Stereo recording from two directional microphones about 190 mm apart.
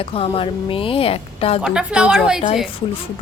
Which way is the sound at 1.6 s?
5° right (ahead or behind).